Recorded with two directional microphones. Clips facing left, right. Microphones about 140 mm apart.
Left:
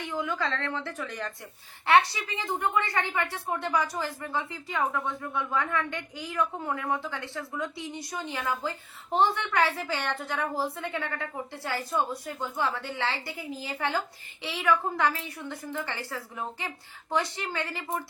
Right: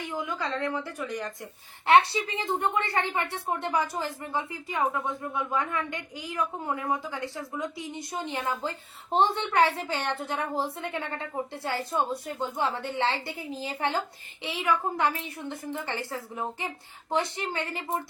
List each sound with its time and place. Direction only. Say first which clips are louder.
0.1 s a woman's voice: left 2 dB; 15° right (ahead or behind)